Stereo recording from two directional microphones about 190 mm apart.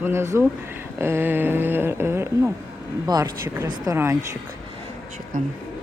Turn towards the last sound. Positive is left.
turn(degrees=-45)  # may be behind; listen again after turning